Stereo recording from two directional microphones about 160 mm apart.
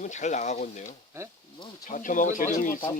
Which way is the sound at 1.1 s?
15° right (ahead or behind).